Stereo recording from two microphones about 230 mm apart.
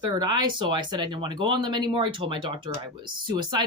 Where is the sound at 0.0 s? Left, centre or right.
Centre.